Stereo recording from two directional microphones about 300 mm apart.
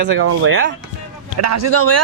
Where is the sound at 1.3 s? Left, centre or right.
Right.